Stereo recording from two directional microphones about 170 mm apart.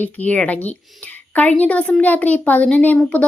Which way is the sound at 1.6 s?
10° left (ahead or behind).